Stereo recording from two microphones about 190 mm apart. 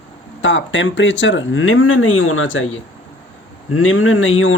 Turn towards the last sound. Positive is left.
turn(degrees=90)